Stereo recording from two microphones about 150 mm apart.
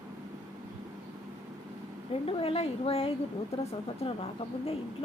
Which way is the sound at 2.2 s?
40° left (ahead or behind).